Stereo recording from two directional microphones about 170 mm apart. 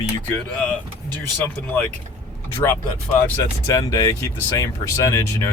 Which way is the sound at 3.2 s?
15° left (ahead or behind).